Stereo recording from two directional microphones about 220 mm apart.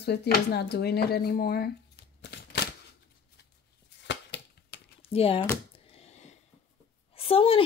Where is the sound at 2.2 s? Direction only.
50° left (ahead or behind).